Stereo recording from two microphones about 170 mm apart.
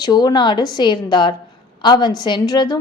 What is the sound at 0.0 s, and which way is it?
A woman's voice, 25° left (ahead or behind).